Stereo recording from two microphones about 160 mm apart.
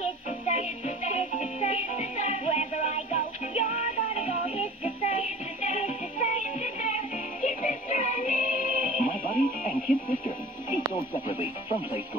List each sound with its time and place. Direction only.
0.0 s music: 50° left (ahead or behind)